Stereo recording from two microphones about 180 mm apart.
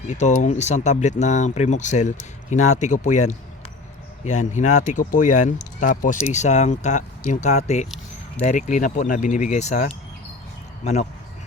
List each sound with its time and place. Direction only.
0.1 s speech: 40° left (ahead or behind)